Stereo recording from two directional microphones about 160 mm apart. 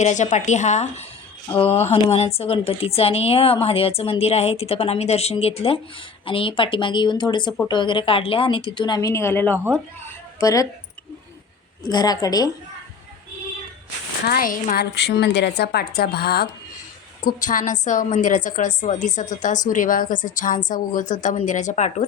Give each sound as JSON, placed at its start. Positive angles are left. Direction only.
{"t": 0.0, "sound": "a woman's voice", "side_deg": 45}
{"t": 11.8, "sound": "a woman's voice", "side_deg": 25}
{"t": 14.3, "sound": "a woman's voice", "side_deg": 60}
{"t": 17.2, "sound": "a woman's voice", "side_deg": 55}